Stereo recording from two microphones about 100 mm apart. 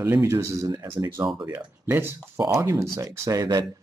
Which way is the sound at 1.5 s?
20° right (ahead or behind).